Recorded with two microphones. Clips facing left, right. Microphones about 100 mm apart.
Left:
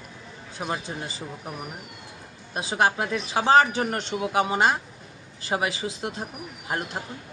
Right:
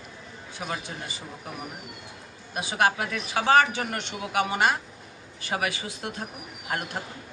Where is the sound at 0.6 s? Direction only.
30° left (ahead or behind).